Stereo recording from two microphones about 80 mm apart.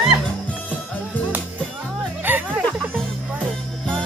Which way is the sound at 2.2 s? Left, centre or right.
Right.